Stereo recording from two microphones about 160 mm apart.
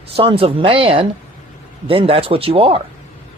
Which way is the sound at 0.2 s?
35° right (ahead or behind).